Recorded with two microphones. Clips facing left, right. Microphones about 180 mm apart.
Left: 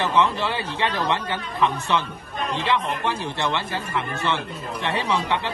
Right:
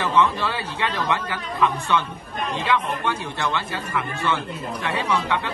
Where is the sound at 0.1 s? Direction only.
20° left (ahead or behind).